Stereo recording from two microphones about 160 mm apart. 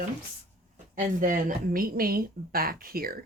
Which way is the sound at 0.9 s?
55° right (ahead or behind).